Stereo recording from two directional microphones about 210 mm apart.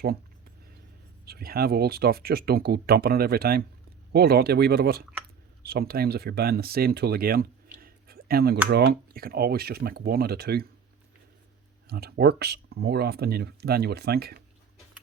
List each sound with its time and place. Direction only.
1.2 s speech: 45° right (ahead or behind)
7.8 s a sound: 45° right (ahead or behind)
8.7 s speech: 45° right (ahead or behind)
11.9 s speech: 50° right (ahead or behind)